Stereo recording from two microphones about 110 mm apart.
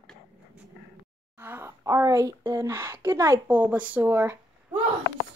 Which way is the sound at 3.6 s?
15° right (ahead or behind).